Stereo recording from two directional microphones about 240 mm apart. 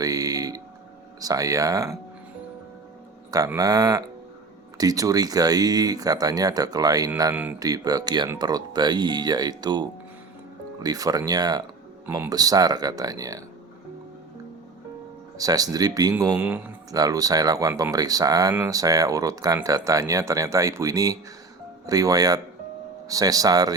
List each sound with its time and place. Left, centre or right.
0.0 s music: centre
1.2 s speech: centre
3.3 s speech: centre
10.8 s speech: centre
15.4 s speech: centre